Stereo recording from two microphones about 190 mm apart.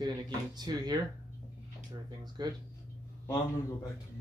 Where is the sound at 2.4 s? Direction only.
20° right (ahead or behind).